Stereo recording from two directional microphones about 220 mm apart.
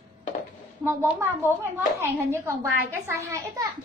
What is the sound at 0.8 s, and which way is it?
A child's voice, 10° right (ahead or behind).